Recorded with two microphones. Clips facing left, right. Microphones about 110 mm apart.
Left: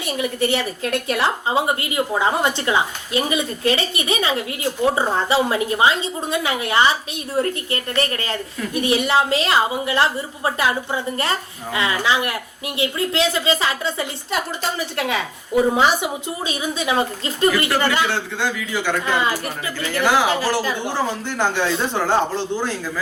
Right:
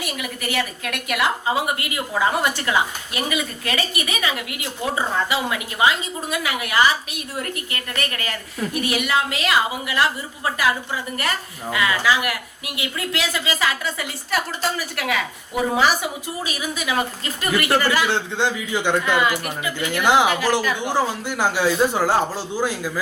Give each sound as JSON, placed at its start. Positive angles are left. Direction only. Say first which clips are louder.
{"t": 0.0, "sound": "a woman's voice", "louder": "left 7 dB", "side_deg": 30}
{"t": 18.3, "sound": "a man's voice", "louder": "right 1 dB", "side_deg": -20}
{"t": 19.0, "sound": "a woman's voice", "louder": "right 1 dB", "side_deg": 30}
{"t": 20.8, "sound": "speech", "louder": "right 1 dB", "side_deg": -10}